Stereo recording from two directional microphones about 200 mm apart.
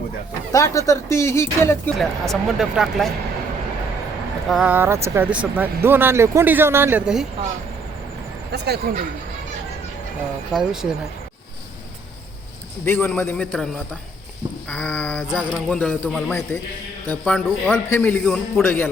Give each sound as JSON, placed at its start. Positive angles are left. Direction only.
{"t": 0.5, "sound": "a man's voice", "side_deg": 15}
{"t": 2.0, "sound": "speech", "side_deg": 0}
{"t": 4.4, "sound": "speech", "side_deg": -5}
{"t": 8.5, "sound": "speech", "side_deg": -55}
{"t": 10.5, "sound": "speech", "side_deg": -5}
{"t": 12.8, "sound": "a man's voice", "side_deg": 10}
{"t": 14.7, "sound": "a man's voice", "side_deg": 5}